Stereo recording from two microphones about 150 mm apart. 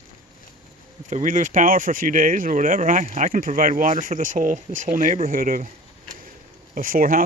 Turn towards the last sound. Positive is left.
turn(degrees=-70)  # may be behind; listen again after turning